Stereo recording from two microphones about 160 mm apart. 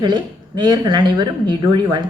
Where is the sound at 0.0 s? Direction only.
30° right (ahead or behind).